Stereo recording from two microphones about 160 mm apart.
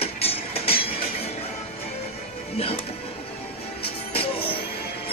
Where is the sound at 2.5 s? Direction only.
35° left (ahead or behind).